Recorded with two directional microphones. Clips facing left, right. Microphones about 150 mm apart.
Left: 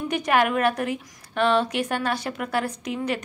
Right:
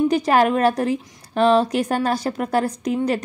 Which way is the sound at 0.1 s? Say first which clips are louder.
Right 5 dB; 35° right (ahead or behind).